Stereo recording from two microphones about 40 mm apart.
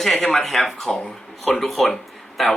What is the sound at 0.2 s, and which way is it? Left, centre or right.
Speech, centre.